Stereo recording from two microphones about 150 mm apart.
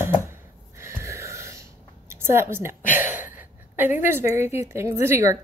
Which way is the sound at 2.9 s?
15° right (ahead or behind).